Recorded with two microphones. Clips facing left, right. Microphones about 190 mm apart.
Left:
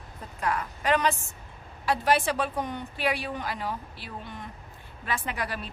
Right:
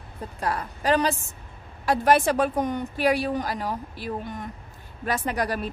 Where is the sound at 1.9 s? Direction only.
45° right (ahead or behind).